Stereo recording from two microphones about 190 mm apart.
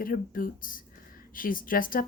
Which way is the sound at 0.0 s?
50° left (ahead or behind).